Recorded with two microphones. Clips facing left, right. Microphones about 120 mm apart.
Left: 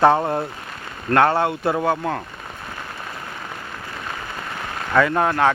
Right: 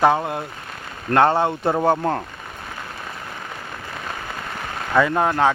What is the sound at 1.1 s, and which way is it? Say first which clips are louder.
Speech: even; 20° right (ahead or behind).